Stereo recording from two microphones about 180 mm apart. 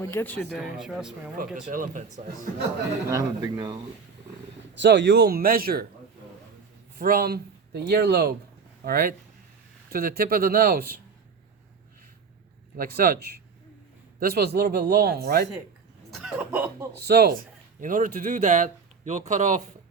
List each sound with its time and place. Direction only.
0.0 s speech: 15° left (ahead or behind)
0.5 s speech: 5° right (ahead or behind)
1.7 s speech: 50° right (ahead or behind)
3.1 s speech: 20° right (ahead or behind)
4.7 s speech: 85° right; by 5.8 s 55° right (ahead or behind)
7.0 s speech: 55° right (ahead or behind)
12.7 s speech: 55° right (ahead or behind)
16.2 s speech: 10° right (ahead or behind)
17.0 s speech: 60° right (ahead or behind)
17.7 s speech: 50° right (ahead or behind)